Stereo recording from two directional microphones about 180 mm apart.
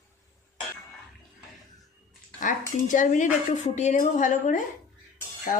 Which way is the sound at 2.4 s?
45° left (ahead or behind).